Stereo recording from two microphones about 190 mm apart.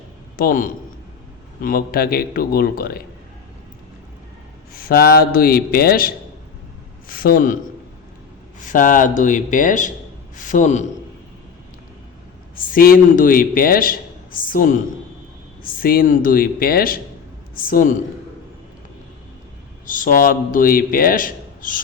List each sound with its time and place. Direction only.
0.3 s a man's voice: 45° left (ahead or behind)
4.7 s a man's voice: 50° left (ahead or behind)
8.7 s a man's voice: 45° left (ahead or behind)
12.5 s a man's voice: 50° left (ahead or behind)
19.9 s a man's voice: 45° left (ahead or behind)